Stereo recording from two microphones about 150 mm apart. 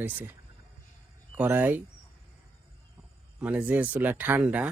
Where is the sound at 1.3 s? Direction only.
15° right (ahead or behind).